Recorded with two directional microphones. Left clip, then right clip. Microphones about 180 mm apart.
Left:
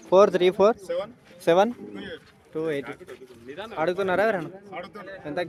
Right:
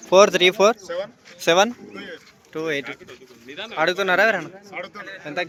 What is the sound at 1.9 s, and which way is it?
Speech, 50° left (ahead or behind).